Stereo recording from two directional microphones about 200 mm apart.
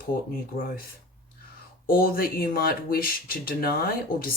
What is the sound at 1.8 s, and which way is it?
Speech, 45° left (ahead or behind).